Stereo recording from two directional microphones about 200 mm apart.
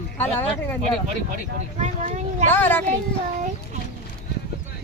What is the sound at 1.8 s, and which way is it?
Speech, 35° right (ahead or behind).